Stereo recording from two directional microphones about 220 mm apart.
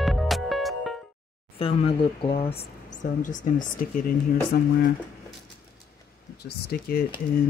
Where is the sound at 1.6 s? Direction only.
25° left (ahead or behind); by 4.7 s 45° left (ahead or behind).